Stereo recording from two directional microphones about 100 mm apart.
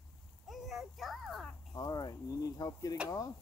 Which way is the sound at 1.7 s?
40° left (ahead or behind).